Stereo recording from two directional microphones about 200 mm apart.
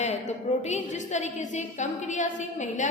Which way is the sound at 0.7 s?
35° left (ahead or behind).